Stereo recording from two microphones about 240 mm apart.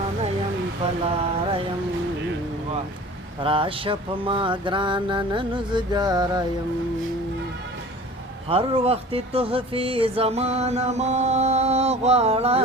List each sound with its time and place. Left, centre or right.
1.0 s mantra: right
3.4 s speech: right
8.4 s speech: right